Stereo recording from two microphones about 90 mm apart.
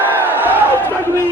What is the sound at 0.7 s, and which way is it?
Battle cry, 25° left (ahead or behind).